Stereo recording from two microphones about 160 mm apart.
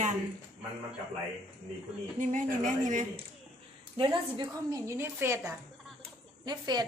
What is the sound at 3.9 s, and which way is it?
Speech, 30° right (ahead or behind).